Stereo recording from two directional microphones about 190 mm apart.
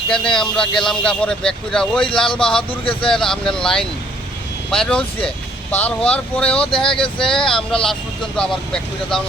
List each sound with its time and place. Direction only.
0.1 s speech: 5° left (ahead or behind)
2.0 s speech: 25° left (ahead or behind)
3.1 s speech: 5° left (ahead or behind)
6.7 s speech: 25° left (ahead or behind)
6.9 s speech: 5° left (ahead or behind)